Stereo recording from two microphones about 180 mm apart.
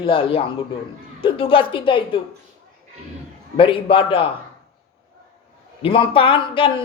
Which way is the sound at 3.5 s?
30° left (ahead or behind).